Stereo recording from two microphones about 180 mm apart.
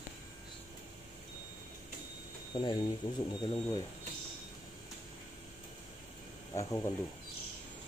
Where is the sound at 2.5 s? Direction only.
25° left (ahead or behind).